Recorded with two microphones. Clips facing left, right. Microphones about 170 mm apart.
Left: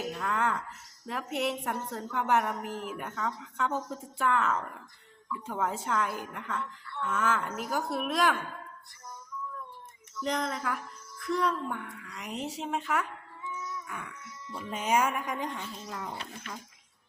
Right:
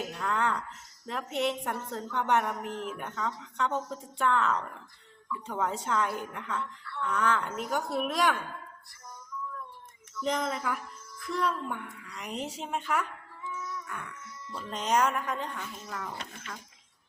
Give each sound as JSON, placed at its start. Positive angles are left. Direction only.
{"t": 0.1, "sound": "a woman's voice", "side_deg": 0}
{"t": 10.2, "sound": "a woman's voice", "side_deg": 0}
{"t": 13.8, "sound": "a sound", "side_deg": 5}
{"t": 14.5, "sound": "speech", "side_deg": 10}
{"t": 15.5, "sound": "speech", "side_deg": 25}